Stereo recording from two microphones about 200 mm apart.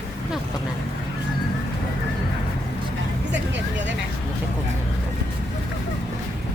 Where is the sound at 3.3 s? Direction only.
60° right (ahead or behind).